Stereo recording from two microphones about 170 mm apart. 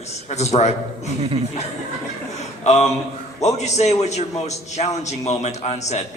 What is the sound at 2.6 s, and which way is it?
A man's voice, 40° left (ahead or behind).